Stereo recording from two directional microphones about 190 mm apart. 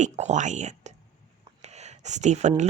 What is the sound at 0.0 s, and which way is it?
Speech, 40° right (ahead or behind).